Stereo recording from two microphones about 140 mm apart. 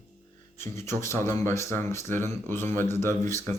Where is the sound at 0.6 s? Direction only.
20° left (ahead or behind).